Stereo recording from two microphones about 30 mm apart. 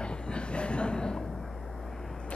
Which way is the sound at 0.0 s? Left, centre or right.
Left.